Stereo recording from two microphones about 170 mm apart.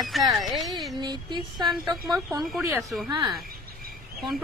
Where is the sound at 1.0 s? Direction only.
25° right (ahead or behind).